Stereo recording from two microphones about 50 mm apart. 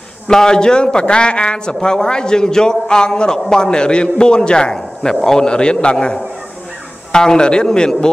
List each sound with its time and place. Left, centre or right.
0.3 s speech: centre